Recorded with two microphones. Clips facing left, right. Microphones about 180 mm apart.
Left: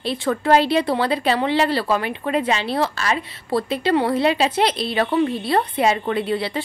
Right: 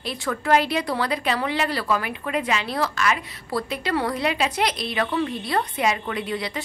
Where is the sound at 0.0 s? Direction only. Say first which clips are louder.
Left 6 dB; 30° left (ahead or behind).